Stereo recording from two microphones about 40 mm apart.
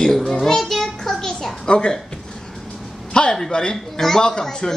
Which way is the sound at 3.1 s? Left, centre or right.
Left.